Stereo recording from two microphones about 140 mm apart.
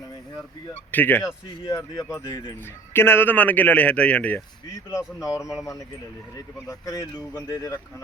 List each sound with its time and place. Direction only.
0.9 s speech: 15° left (ahead or behind)
2.9 s speech: 15° left (ahead or behind)
4.9 s speech: 25° left (ahead or behind)